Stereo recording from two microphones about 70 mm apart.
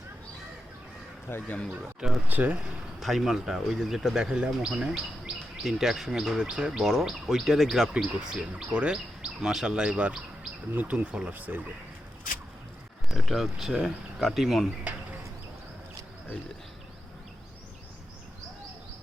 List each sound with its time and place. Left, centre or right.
1.3 s speech: left
2.0 s speech: centre
2.2 s speech: right
3.0 s speech: centre
8.4 s speech: centre
13.1 s speech: centre